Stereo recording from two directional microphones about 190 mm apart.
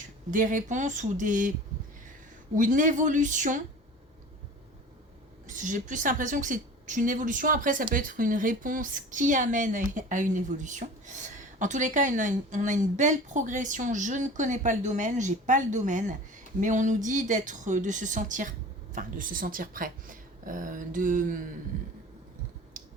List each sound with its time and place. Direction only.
0.3 s speech: 45° right (ahead or behind)
2.6 s speech: 45° right (ahead or behind)
5.5 s a woman's voice: 40° right (ahead or behind)
22.8 s finger snapping: 40° right (ahead or behind)